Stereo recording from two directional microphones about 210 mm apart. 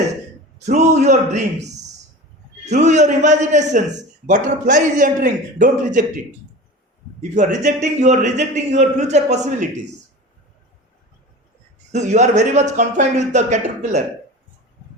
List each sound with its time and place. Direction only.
0.6 s a man's voice: 35° right (ahead or behind)
7.2 s a man's voice: 35° right (ahead or behind)
11.9 s a man's voice: 35° right (ahead or behind)